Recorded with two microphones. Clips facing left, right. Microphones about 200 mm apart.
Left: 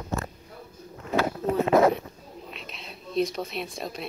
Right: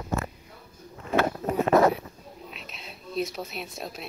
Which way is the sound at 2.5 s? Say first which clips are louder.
Left 2 dB; centre (ahead or behind).